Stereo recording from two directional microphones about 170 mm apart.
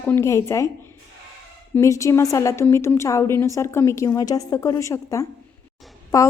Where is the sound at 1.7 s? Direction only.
20° left (ahead or behind).